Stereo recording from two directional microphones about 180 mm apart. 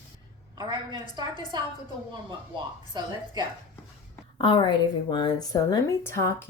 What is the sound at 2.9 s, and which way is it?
Speech, 25° right (ahead or behind).